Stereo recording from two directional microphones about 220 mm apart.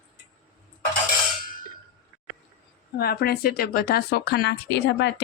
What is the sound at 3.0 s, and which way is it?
Speech, 45° left (ahead or behind).